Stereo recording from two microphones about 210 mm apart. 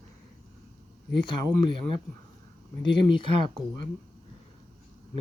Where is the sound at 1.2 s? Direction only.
25° left (ahead or behind).